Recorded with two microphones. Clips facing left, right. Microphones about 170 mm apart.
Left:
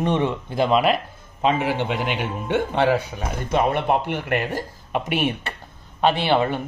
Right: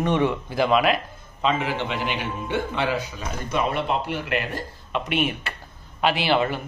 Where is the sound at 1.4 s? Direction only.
50° left (ahead or behind).